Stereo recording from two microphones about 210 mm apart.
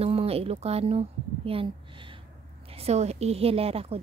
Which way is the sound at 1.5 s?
25° right (ahead or behind).